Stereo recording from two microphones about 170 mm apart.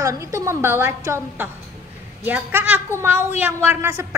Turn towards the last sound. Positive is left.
turn(degrees=-15)  # may be behind; listen again after turning